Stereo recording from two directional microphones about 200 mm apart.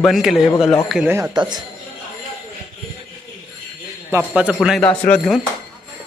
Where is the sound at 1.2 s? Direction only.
20° right (ahead or behind).